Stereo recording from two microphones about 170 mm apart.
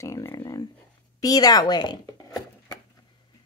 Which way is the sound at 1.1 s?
20° left (ahead or behind).